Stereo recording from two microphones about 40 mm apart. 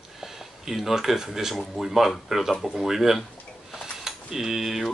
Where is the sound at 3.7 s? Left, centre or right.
Centre.